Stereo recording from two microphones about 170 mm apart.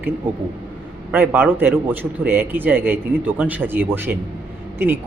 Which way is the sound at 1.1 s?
10° right (ahead or behind).